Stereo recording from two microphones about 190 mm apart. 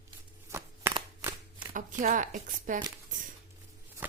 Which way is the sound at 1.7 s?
45° right (ahead or behind).